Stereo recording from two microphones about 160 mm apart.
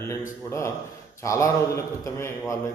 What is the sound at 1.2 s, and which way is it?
A man's voice, 20° left (ahead or behind).